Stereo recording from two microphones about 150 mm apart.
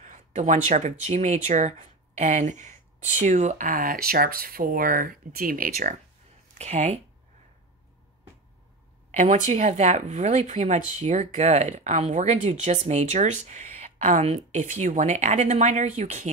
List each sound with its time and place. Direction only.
0.0 s speech: 55° right (ahead or behind); by 5.9 s 70° right (ahead or behind)
6.6 s speech: 50° right (ahead or behind)
9.1 s speech: 50° right (ahead or behind)